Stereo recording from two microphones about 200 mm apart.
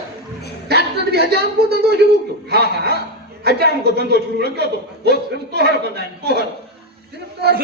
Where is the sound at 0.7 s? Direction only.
55° right (ahead or behind).